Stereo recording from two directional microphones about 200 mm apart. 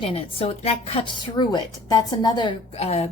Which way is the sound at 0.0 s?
25° left (ahead or behind).